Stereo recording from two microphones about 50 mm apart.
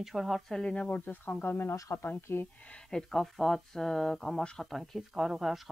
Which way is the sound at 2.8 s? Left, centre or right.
Centre.